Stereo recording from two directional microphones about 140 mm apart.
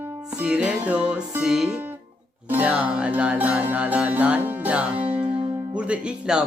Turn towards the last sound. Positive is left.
turn(degrees=-5)  # may be behind; listen again after turning